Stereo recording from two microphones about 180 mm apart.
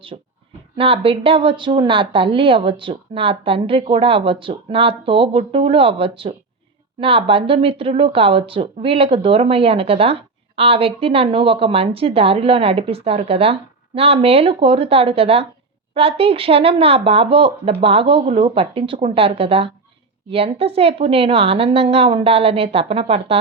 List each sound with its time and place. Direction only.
0.1 s speech: 35° right (ahead or behind)